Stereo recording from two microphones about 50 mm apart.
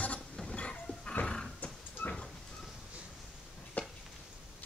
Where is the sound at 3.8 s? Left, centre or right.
Left.